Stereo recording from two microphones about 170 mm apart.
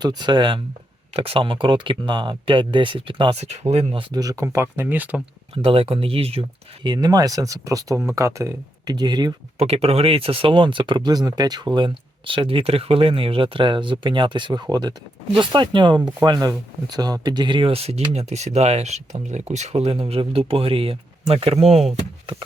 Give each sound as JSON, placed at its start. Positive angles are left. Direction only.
{"t": 0.2, "sound": "speech", "side_deg": -25}
{"t": 4.1, "sound": "speech", "side_deg": -20}
{"t": 5.6, "sound": "speech", "side_deg": -35}
{"t": 6.8, "sound": "speech", "side_deg": -25}
{"t": 9.6, "sound": "speech", "side_deg": -35}